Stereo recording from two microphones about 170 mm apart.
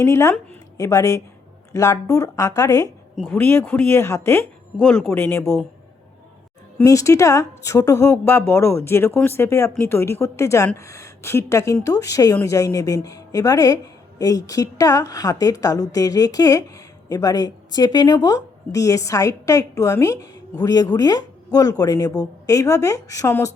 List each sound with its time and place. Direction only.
0.0 s a woman's voice: 15° left (ahead or behind)
6.7 s a woman's voice: 20° left (ahead or behind)